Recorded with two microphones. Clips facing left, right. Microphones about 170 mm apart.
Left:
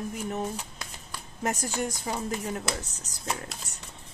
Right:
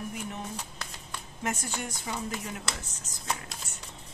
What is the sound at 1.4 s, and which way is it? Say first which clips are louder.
Speech: left 5 dB; 40° left (ahead or behind).